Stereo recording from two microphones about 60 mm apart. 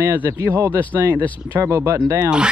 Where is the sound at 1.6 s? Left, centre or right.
Right.